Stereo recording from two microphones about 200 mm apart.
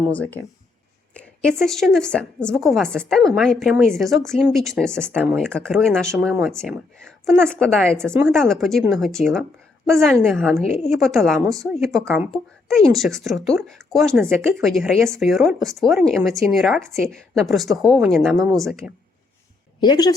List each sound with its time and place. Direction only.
0.1 s speech: 10° left (ahead or behind)
19.8 s speech: 20° left (ahead or behind)